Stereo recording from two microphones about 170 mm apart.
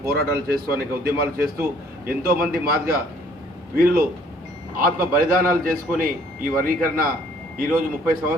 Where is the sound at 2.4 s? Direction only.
65° right (ahead or behind).